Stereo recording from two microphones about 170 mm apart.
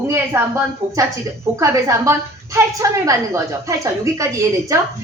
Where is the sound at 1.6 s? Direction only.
20° right (ahead or behind).